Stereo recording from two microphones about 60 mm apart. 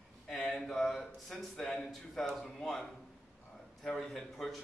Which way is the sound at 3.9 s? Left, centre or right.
Centre.